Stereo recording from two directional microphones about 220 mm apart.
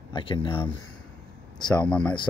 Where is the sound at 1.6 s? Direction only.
5° left (ahead or behind).